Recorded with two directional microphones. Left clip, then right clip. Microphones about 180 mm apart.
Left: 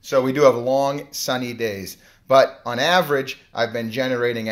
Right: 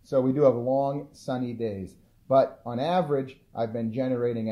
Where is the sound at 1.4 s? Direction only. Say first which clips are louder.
Left 6 dB; centre (ahead or behind).